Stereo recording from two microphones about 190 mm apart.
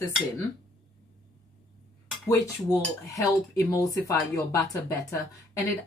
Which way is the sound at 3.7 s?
15° left (ahead or behind).